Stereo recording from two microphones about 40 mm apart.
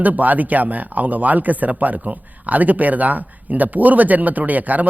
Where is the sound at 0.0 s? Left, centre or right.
Right.